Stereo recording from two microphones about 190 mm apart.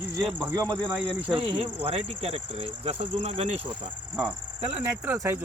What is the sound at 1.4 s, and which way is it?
Speech, 30° right (ahead or behind).